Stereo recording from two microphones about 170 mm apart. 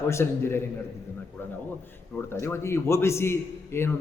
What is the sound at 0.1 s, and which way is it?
Speech, 15° left (ahead or behind).